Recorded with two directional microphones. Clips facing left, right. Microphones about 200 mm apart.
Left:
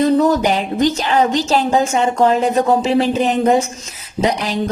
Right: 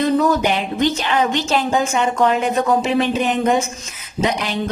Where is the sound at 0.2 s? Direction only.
40° left (ahead or behind).